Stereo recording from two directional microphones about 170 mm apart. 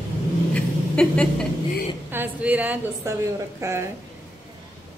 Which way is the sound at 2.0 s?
10° right (ahead or behind).